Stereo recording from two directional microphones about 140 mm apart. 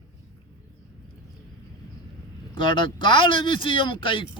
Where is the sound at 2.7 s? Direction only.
35° left (ahead or behind).